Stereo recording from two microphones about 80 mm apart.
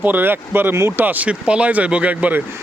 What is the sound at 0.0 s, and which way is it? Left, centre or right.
Speech, right.